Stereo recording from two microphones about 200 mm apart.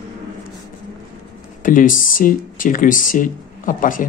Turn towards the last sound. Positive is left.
turn(degrees=40)  # may be behind; listen again after turning